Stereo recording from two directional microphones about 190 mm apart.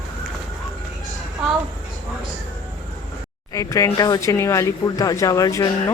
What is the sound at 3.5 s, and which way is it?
Speech, 15° left (ahead or behind).